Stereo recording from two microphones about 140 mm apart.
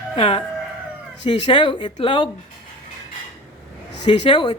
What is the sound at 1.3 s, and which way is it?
A woman's voice, 35° left (ahead or behind).